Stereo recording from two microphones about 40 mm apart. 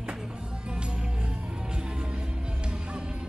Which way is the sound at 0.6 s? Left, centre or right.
Right.